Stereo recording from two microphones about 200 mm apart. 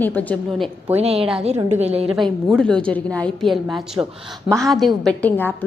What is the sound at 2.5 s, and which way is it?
A woman's voice, 5° left (ahead or behind).